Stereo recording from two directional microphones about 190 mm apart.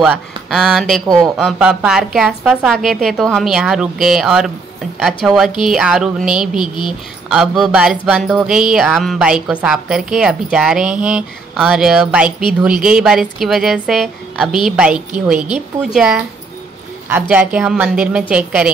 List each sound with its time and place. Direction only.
0.0 s speech: 5° right (ahead or behind)
6.6 s speech: 25° left (ahead or behind)
7.2 s a woman's voice: centre (ahead or behind)